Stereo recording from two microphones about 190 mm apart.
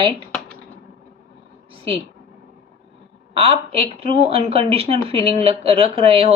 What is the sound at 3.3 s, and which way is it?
Speech, 30° right (ahead or behind).